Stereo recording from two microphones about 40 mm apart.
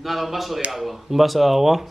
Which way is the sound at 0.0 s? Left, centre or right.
Centre.